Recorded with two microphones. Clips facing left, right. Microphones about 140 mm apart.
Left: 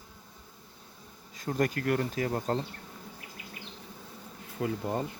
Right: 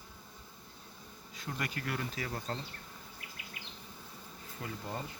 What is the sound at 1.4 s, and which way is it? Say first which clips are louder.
Speech: left 10 dB; 45° left (ahead or behind).